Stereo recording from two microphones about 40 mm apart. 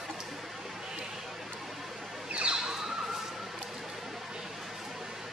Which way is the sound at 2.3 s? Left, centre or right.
Right.